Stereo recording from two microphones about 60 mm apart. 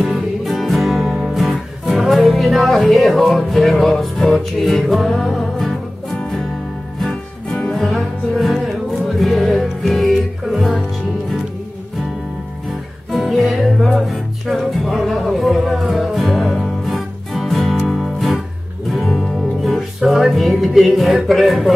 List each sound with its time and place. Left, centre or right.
0.0 s music: centre
7.7 s music: centre
13.1 s music: centre
20.0 s speech: centre